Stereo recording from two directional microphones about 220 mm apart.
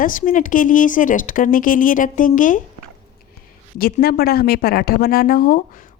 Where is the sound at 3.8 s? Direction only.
40° left (ahead or behind).